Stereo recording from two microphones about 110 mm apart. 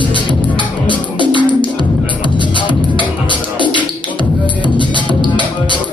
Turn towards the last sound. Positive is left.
turn(degrees=45)  # may be behind; listen again after turning